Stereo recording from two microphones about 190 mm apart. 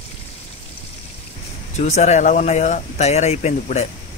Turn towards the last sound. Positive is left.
turn(degrees=35)  # may be behind; listen again after turning